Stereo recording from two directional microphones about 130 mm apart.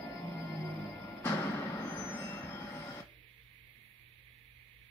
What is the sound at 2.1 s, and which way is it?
Train, 15° left (ahead or behind).